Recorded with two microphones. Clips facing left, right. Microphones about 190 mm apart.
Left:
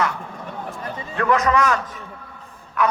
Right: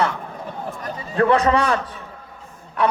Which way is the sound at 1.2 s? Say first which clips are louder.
Right 2 dB; 30° right (ahead or behind).